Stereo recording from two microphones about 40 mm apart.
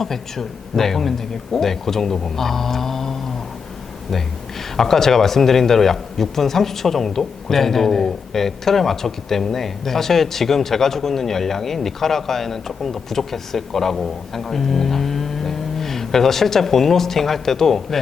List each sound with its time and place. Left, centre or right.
0.0 s speech: centre
4.8 s speech: centre